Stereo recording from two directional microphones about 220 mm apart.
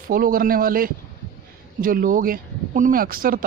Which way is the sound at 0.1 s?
40° right (ahead or behind).